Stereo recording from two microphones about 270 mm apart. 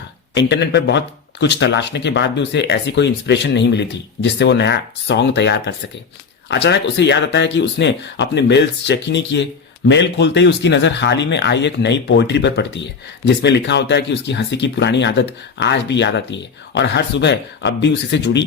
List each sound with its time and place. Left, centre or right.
0.3 s speech: left